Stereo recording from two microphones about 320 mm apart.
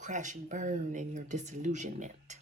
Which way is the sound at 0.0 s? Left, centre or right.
Right.